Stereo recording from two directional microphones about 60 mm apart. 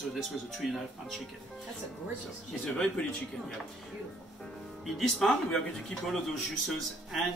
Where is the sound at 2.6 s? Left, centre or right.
Centre.